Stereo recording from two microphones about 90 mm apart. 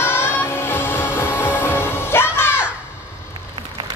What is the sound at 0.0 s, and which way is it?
Music, 25° left (ahead or behind).